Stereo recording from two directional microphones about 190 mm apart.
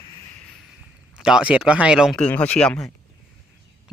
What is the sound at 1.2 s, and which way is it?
Speech, 5° right (ahead or behind).